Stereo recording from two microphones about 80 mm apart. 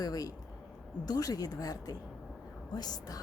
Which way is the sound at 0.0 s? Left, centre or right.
Left.